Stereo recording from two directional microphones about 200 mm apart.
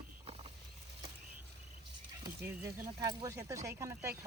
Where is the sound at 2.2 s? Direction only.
15° right (ahead or behind).